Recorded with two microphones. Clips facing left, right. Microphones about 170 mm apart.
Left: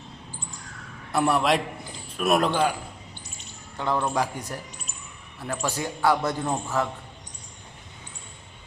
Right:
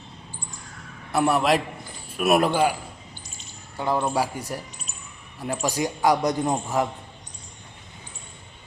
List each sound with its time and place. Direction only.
1.1 s a man's voice: centre (ahead or behind)
3.8 s a man's voice: 10° right (ahead or behind)
5.6 s a man's voice: 15° right (ahead or behind)